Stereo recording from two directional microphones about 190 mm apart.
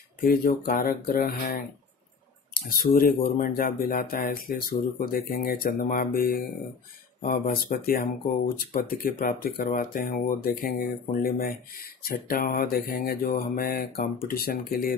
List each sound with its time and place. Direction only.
0.2 s speech: 50° left (ahead or behind)
2.8 s speech: 50° left (ahead or behind)